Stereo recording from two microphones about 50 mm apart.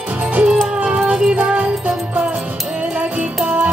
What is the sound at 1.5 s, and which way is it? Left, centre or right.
Music, right.